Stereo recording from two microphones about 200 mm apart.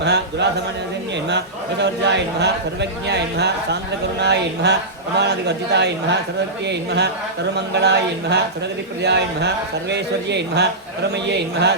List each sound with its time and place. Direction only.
0.0 s speech: 55° right (ahead or behind)
1.8 s speech: 60° right (ahead or behind)